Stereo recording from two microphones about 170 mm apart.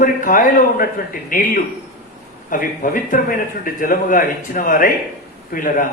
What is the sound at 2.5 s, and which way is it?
A man's voice, 50° left (ahead or behind).